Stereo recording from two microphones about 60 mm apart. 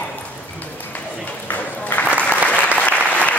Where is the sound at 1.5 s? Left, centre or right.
Left.